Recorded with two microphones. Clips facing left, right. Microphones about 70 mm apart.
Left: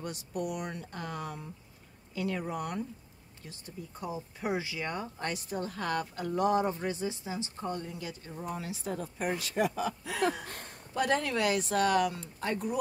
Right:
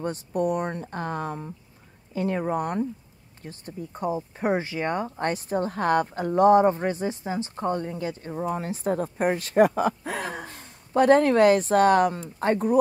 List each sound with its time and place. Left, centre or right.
0.0 s speech: right